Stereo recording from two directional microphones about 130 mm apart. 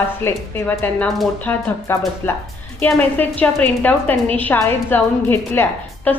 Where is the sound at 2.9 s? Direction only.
10° left (ahead or behind).